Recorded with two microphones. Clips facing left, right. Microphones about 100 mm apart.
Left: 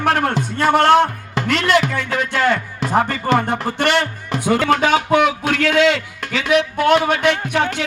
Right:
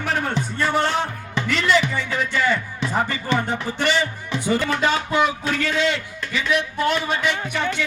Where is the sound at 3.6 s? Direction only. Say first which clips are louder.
Left 4 dB; 60° left (ahead or behind).